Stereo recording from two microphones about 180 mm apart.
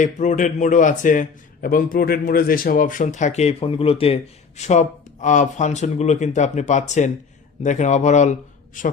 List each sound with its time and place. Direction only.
0.0 s a man's voice: 45° left (ahead or behind)